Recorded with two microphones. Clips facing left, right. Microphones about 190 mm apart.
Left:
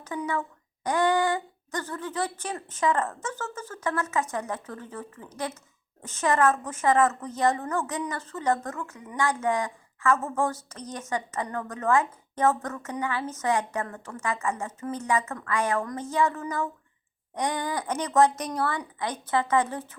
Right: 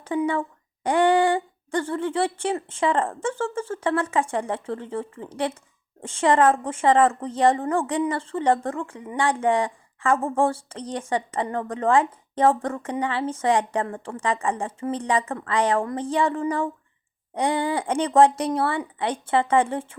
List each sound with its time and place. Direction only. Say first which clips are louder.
0.1 s a woman's voice: right 7 dB; 20° right (ahead or behind)
17.7 s speech: right 6 dB; 30° right (ahead or behind)